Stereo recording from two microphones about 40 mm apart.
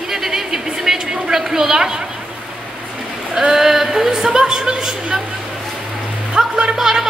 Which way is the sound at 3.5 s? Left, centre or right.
Centre.